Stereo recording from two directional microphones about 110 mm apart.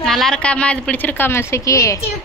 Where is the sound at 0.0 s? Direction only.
5° left (ahead or behind); by 2.0 s 30° left (ahead or behind).